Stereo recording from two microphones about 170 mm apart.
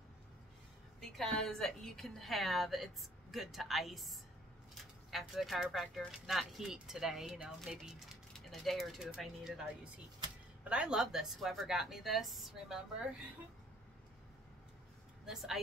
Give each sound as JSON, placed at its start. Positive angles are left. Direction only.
{"t": 1.1, "sound": "speech", "side_deg": 0}
{"t": 10.7, "sound": "speech", "side_deg": -5}
{"t": 15.2, "sound": "speech", "side_deg": 0}